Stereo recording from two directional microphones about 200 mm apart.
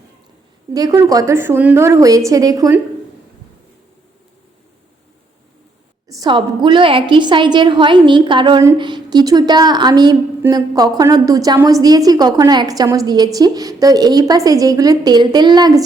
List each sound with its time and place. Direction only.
0.7 s a woman's voice: 20° right (ahead or behind)
6.1 s a woman's voice: 20° right (ahead or behind)